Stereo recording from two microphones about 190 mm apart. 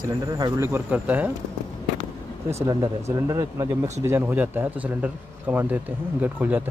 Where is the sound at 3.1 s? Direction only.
15° right (ahead or behind).